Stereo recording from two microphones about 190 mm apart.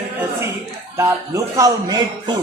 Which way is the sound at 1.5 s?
20° right (ahead or behind).